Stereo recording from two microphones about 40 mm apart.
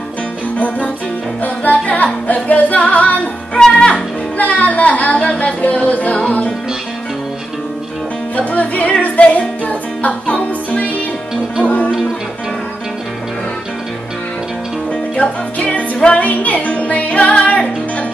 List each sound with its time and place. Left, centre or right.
0.6 s music: left
3.5 s music: left
4.4 s a sound: left
5.4 s speech: left
8.4 s music: left
16.2 s music: left